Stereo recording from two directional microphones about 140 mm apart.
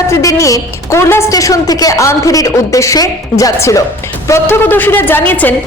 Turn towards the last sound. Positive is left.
turn(degrees=15)  # may be behind; listen again after turning